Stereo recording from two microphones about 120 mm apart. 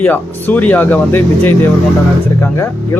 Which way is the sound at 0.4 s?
15° left (ahead or behind).